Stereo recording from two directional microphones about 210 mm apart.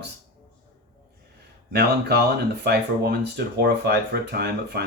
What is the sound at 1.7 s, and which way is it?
Speech, 50° right (ahead or behind).